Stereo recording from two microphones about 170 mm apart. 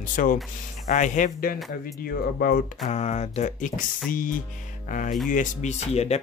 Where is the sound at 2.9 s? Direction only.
40° left (ahead or behind).